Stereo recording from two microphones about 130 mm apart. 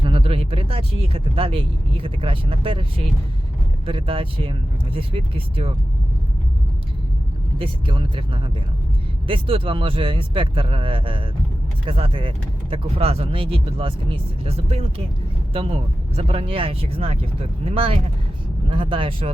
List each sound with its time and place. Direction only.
0.0 s speech: 45° right (ahead or behind)
3.8 s speech: 45° right (ahead or behind)
7.6 s speech: 40° right (ahead or behind)